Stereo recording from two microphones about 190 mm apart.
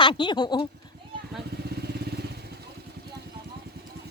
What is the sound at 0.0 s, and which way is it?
Speech, 25° left (ahead or behind).